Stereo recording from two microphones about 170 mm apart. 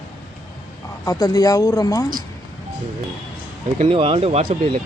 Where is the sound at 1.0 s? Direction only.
20° left (ahead or behind).